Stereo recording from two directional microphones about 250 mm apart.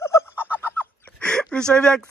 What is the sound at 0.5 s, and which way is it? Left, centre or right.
Fowl, centre.